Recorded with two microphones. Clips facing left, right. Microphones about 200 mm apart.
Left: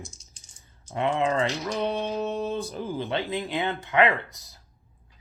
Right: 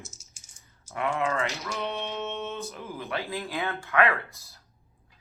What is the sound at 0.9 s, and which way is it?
Speech, 25° left (ahead or behind).